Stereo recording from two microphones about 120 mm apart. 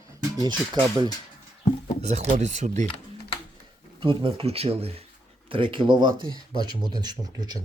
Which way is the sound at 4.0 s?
45° right (ahead or behind).